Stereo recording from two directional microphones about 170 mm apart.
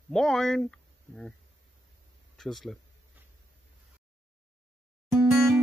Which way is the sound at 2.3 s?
Centre (ahead or behind).